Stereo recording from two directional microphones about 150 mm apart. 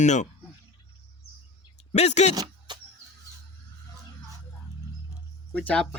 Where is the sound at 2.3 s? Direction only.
25° right (ahead or behind).